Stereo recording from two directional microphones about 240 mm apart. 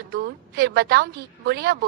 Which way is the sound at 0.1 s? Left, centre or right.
Right.